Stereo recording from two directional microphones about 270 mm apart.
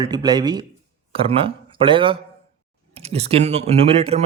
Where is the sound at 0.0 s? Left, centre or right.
Centre.